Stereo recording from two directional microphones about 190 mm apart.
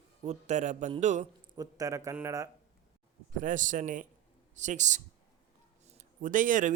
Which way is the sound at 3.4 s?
45° right (ahead or behind).